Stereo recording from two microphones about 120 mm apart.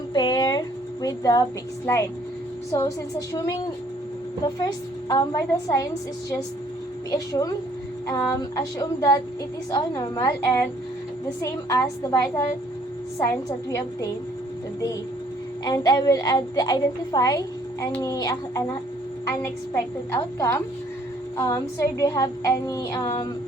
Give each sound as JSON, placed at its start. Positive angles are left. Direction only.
{"t": 0.1, "sound": "a sound", "side_deg": 35}
{"t": 2.7, "sound": "a woman's voice", "side_deg": 30}
{"t": 7.1, "sound": "a woman's voice", "side_deg": 30}
{"t": 11.3, "sound": "a woman's voice", "side_deg": 30}
{"t": 15.6, "sound": "a woman's voice", "side_deg": 35}
{"t": 19.7, "sound": "a woman's voice", "side_deg": 25}